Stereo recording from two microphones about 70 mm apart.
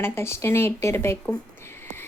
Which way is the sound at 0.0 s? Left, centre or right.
Left.